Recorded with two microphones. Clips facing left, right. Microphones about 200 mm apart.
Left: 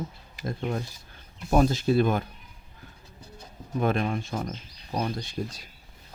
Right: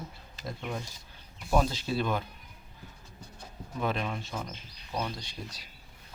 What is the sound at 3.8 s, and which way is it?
Speech, 50° left (ahead or behind).